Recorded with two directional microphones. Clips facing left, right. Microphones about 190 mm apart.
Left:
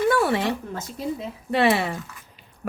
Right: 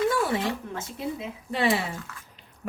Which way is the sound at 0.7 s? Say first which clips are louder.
Left 3 dB; 40° left (ahead or behind).